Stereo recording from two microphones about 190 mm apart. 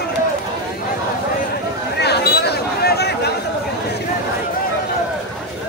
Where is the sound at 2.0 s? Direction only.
60° left (ahead or behind).